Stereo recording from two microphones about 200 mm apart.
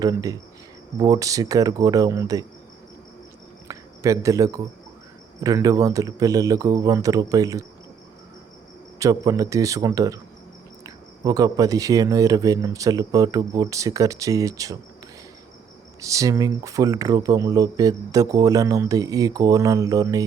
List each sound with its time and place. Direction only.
0.0 s speech: 20° right (ahead or behind)
3.7 s speech: 15° right (ahead or behind)
9.0 s speech: 15° right (ahead or behind)
16.0 s speech: 15° right (ahead or behind)